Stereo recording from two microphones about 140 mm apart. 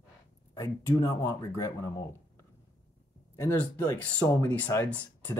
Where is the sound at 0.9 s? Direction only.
25° left (ahead or behind).